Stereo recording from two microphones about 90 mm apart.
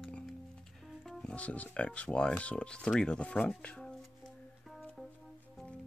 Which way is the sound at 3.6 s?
15° left (ahead or behind).